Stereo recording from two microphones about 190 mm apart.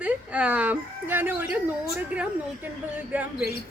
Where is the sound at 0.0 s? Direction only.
5° right (ahead or behind).